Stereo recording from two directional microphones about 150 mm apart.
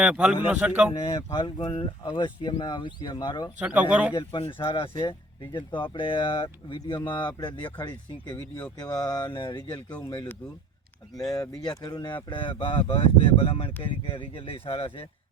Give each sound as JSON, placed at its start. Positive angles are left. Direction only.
{"t": 0.0, "sound": "a man's voice", "side_deg": -5}
{"t": 0.9, "sound": "speech", "side_deg": 30}
{"t": 3.6, "sound": "speech", "side_deg": -10}
{"t": 4.1, "sound": "speech", "side_deg": 35}
{"t": 8.4, "sound": "speech", "side_deg": 15}
{"t": 8.8, "sound": "a sound", "side_deg": 25}
{"t": 11.3, "sound": "speech", "side_deg": 25}